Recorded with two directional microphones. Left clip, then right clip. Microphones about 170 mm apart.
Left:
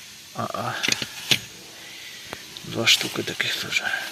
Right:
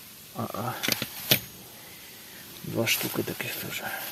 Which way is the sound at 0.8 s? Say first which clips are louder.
Left 4 dB; 20° right (ahead or behind).